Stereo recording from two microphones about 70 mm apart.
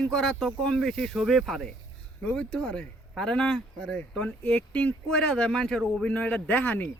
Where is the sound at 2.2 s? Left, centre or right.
Centre.